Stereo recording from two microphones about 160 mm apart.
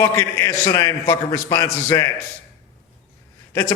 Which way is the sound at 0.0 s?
20° left (ahead or behind).